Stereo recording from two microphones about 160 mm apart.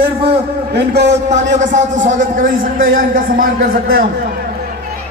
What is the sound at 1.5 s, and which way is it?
A man's voice, 50° right (ahead or behind).